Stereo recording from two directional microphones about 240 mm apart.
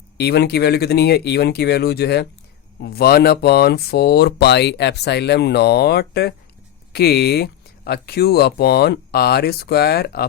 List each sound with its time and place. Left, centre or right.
0.2 s speech: left